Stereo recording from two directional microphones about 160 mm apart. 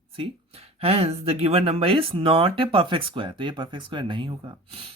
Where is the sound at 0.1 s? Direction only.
35° right (ahead or behind).